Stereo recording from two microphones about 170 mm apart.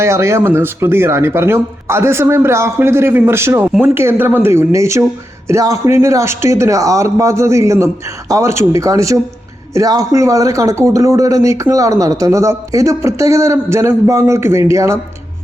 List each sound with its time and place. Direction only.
0.0 s speech: 15° right (ahead or behind)